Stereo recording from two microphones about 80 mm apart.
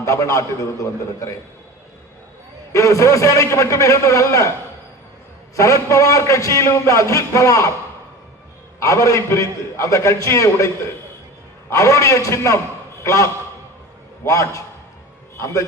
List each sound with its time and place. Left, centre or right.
0.0 s a man's voice: left
2.7 s a man's voice: left
5.5 s a man's voice: left
8.8 s a man's voice: left
11.7 s a man's voice: left